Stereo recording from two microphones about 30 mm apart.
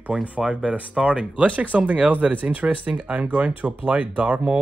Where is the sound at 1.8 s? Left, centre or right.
Right.